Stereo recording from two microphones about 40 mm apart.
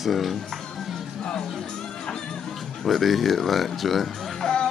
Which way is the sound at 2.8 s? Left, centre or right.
Centre.